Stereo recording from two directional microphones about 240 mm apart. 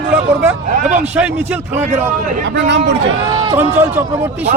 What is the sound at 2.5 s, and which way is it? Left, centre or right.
Speech, right.